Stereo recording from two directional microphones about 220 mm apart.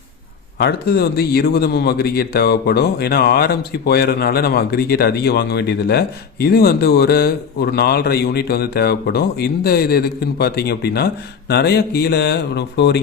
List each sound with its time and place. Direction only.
0.6 s speech: 50° left (ahead or behind)